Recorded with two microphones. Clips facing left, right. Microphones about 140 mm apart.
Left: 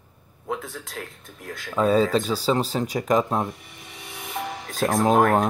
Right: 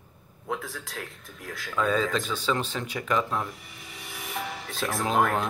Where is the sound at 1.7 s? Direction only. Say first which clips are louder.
Left 6 dB; 35° left (ahead or behind).